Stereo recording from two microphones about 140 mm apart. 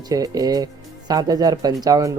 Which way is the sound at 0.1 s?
25° right (ahead or behind).